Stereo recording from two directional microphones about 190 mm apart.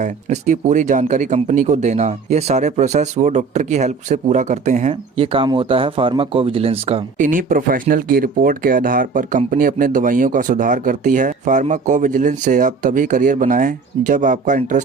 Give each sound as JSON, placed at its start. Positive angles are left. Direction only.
{"t": 0.0, "sound": "speech", "side_deg": -40}
{"t": 7.3, "sound": "speech", "side_deg": -45}